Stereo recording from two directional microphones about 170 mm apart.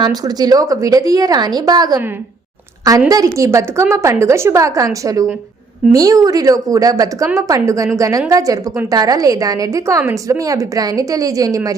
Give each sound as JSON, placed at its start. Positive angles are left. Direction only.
{"t": 0.0, "sound": "a woman's voice", "side_deg": -25}
{"t": 3.1, "sound": "a woman's voice", "side_deg": -20}